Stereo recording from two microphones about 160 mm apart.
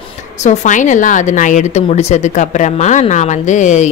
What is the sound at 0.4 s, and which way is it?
Speech, 50° left (ahead or behind).